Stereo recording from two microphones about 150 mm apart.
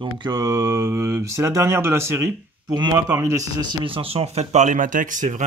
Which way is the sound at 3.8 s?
40° right (ahead or behind).